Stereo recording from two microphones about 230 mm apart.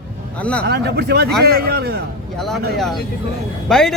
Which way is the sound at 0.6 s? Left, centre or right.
Right.